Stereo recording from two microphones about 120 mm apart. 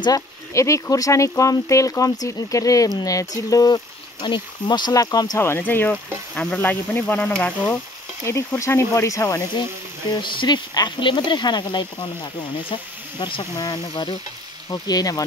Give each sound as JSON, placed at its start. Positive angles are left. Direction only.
{"t": 0.0, "sound": "speech", "side_deg": 30}
{"t": 5.4, "sound": "speech", "side_deg": 20}
{"t": 8.3, "sound": "speech", "side_deg": 20}
{"t": 10.2, "sound": "speech", "side_deg": 40}